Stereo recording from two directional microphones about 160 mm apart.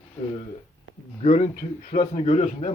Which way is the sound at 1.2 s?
50° left (ahead or behind).